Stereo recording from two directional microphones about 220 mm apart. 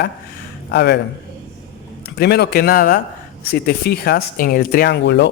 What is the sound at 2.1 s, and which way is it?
Speech, 45° left (ahead or behind).